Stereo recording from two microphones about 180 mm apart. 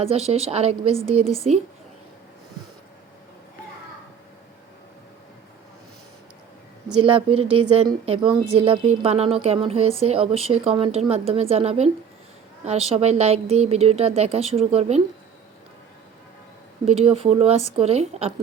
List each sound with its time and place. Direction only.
0.0 s a woman's voice: 35° right (ahead or behind)
7.2 s a woman's voice: 30° right (ahead or behind)
16.8 s a woman's voice: 35° right (ahead or behind)